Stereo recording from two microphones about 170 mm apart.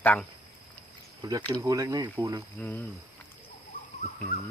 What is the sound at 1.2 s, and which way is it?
Speech, 20° right (ahead or behind).